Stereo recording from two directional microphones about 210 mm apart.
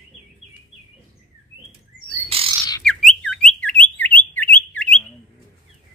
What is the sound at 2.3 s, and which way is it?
Bird, 25° right (ahead or behind).